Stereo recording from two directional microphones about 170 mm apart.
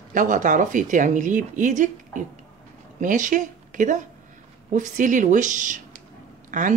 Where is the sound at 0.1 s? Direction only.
50° right (ahead or behind).